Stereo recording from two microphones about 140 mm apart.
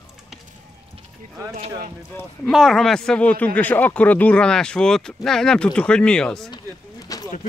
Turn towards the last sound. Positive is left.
turn(degrees=30)  # may be behind; listen again after turning